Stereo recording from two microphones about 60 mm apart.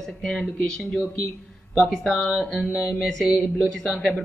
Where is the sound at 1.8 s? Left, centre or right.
Centre.